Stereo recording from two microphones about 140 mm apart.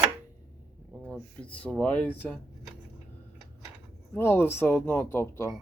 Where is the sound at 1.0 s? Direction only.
10° left (ahead or behind).